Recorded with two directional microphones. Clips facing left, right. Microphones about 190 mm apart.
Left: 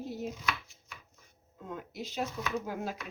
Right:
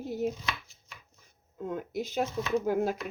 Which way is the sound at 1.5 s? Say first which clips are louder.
Right 7 dB; 50° right (ahead or behind).